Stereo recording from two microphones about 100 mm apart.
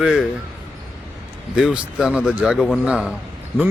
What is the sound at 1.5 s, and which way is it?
Speech, 10° right (ahead or behind).